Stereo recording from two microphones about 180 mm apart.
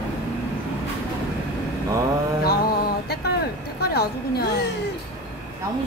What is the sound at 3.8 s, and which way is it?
Speech, 60° left (ahead or behind).